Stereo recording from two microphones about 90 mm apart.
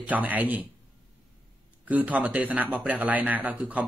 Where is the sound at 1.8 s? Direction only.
15° right (ahead or behind).